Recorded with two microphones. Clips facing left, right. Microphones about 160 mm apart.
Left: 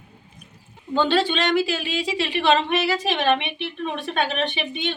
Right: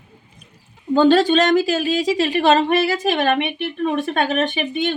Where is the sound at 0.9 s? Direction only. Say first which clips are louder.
Right 7 dB; 45° right (ahead or behind).